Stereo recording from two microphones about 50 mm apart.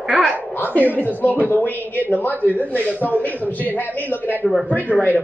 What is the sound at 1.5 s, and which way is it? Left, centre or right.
Speech, left.